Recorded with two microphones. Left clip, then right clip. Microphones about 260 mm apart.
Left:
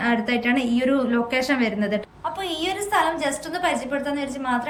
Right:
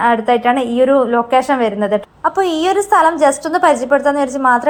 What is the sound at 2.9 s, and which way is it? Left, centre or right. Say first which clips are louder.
A woman's voice: right 10 dB; right.